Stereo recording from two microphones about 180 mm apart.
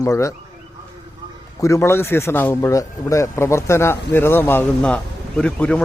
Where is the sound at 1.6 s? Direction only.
15° left (ahead or behind).